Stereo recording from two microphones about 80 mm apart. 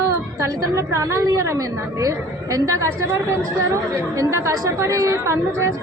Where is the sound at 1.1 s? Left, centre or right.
Right.